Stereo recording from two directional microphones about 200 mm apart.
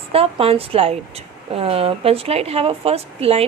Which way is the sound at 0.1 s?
30° right (ahead or behind).